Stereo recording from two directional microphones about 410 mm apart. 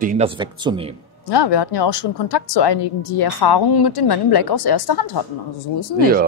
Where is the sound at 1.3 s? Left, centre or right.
Left.